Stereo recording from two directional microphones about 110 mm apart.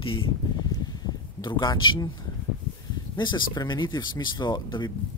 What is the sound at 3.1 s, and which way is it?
Speech, 45° left (ahead or behind).